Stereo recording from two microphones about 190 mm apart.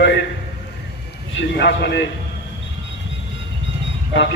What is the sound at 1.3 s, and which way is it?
Speech, 70° left (ahead or behind).